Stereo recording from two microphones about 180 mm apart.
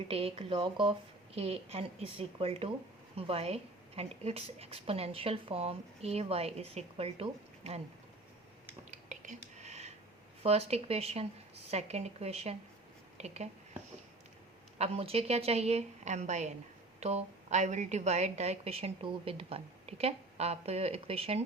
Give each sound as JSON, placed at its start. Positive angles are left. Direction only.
{"t": 0.1, "sound": "a woman's voice", "side_deg": -30}
{"t": 8.9, "sound": "whispering", "side_deg": -45}
{"t": 10.4, "sound": "a woman's voice", "side_deg": -35}
{"t": 14.8, "sound": "a woman's voice", "side_deg": -35}